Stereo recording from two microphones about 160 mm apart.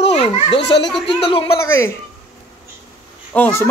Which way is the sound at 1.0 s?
35° left (ahead or behind).